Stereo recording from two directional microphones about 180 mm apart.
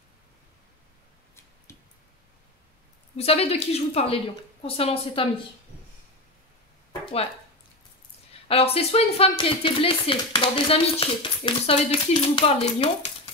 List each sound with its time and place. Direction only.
3.2 s speech: 35° left (ahead or behind)
8.5 s speech: 35° left (ahead or behind)